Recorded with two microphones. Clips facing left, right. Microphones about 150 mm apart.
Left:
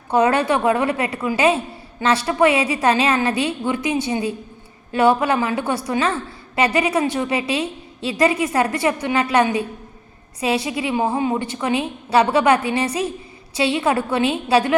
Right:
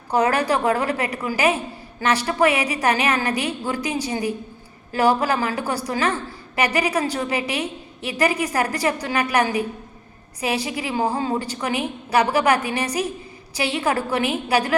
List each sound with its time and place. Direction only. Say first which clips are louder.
0.1 s a woman's voice: left 3 dB; 25° left (ahead or behind)